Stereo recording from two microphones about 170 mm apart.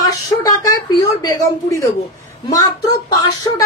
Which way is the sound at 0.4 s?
20° left (ahead or behind).